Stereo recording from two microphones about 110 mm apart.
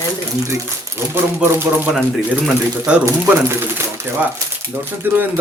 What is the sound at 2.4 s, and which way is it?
Speech, 10° right (ahead or behind).